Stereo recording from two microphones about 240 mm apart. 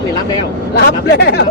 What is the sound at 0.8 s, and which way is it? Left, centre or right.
Speech, left.